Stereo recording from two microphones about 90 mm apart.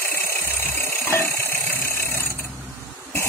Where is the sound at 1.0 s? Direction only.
30° left (ahead or behind).